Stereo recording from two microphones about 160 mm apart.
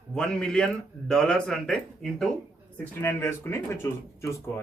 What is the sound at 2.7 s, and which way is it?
Speech, 15° left (ahead or behind).